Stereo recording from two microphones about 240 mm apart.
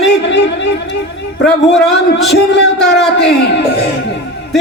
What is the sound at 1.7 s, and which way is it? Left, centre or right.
Speech, centre.